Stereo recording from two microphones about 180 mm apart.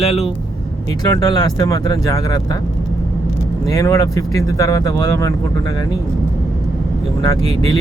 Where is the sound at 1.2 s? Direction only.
20° left (ahead or behind).